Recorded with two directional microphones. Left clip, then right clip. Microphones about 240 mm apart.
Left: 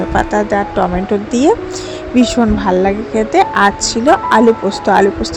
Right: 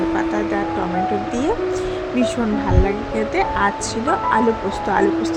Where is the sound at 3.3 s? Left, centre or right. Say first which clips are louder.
Left 9 dB; left.